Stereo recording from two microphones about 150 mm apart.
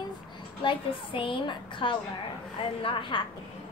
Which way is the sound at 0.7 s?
35° left (ahead or behind).